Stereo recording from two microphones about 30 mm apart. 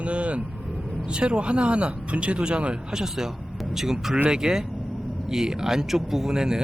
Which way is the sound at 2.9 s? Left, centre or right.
Centre.